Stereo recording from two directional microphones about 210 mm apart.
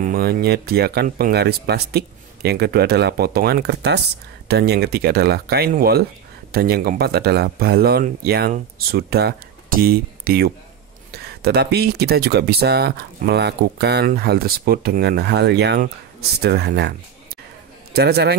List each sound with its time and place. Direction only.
0.0 s speech: 45° right (ahead or behind)
17.9 s speech: 50° right (ahead or behind)